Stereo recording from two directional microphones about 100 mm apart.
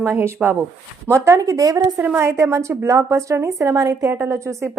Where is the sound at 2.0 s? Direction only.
20° right (ahead or behind).